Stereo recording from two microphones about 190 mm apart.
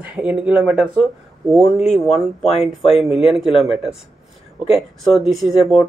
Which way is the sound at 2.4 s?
35° left (ahead or behind).